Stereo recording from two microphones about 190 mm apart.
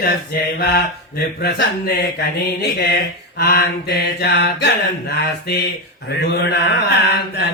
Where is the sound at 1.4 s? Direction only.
55° left (ahead or behind).